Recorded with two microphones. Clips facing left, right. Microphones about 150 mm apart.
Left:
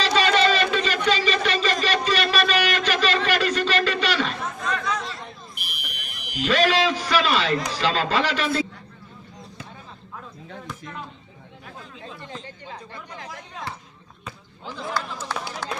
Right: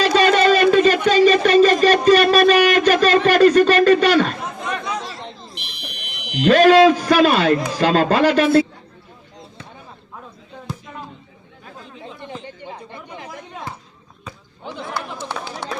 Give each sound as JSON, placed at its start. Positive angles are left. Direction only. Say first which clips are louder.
{"t": 0.0, "sound": "a sound", "louder": "right 5 dB", "side_deg": -50}
{"t": 3.2, "sound": "a man's voice", "louder": "right 11 dB", "side_deg": -50}
{"t": 4.6, "sound": "chatter", "louder": "right 1 dB", "side_deg": -15}
{"t": 5.2, "sound": "fire alarm", "louder": "right 4 dB", "side_deg": -25}
{"t": 6.3, "sound": "a man's voice", "louder": "right 9 dB", "side_deg": -50}
{"t": 11.9, "sound": "chatter", "louder": "right 5 dB", "side_deg": -15}